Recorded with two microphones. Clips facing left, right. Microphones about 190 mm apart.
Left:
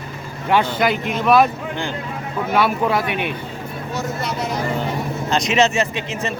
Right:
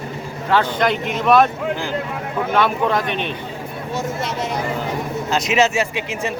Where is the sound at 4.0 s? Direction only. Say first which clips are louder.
Right 1 dB; 25° right (ahead or behind).